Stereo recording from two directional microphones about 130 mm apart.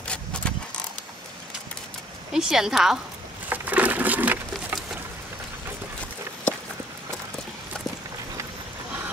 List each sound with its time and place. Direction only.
0.0 s vehicle: 10° left (ahead or behind)
2.3 s a woman's voice: 5° right (ahead or behind)
3.4 s a sound: 15° right (ahead or behind)